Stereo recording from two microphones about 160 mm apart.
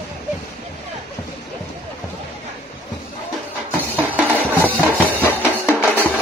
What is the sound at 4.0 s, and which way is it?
Music, 10° right (ahead or behind).